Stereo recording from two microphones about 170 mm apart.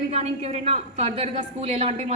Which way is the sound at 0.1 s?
40° right (ahead or behind).